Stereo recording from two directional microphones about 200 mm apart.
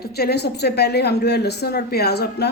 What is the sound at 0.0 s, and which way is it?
A woman's voice, 50° left (ahead or behind).